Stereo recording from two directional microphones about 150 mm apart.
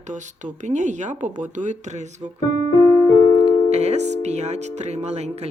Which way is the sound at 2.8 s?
20° left (ahead or behind).